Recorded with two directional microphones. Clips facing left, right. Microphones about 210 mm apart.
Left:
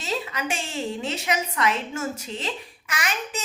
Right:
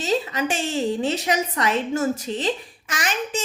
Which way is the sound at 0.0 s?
30° right (ahead or behind).